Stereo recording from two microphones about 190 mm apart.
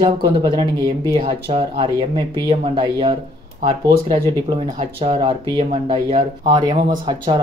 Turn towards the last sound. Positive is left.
turn(degrees=-25)  # may be behind; listen again after turning